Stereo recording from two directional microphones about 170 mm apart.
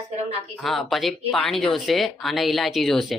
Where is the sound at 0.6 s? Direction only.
Centre (ahead or behind).